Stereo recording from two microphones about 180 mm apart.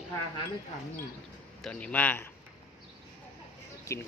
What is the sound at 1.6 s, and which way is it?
Speech, 10° left (ahead or behind).